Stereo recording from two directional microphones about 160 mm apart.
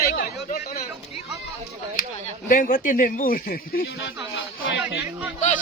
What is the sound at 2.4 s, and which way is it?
Speech, 55° left (ahead or behind).